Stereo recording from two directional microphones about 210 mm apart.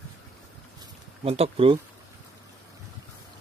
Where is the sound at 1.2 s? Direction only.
30° right (ahead or behind).